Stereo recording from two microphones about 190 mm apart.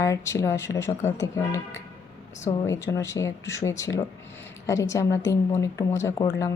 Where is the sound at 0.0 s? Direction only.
15° left (ahead or behind).